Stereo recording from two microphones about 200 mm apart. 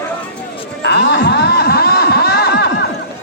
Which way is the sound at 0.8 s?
60° left (ahead or behind).